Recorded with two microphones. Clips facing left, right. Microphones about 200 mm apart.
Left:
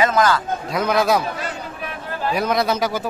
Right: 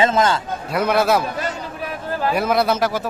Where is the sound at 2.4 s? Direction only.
5° right (ahead or behind).